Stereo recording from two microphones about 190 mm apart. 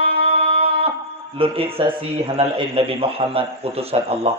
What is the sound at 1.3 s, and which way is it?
A man's voice, 30° right (ahead or behind).